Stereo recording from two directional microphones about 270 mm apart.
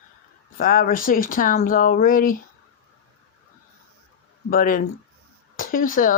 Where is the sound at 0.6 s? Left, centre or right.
Left.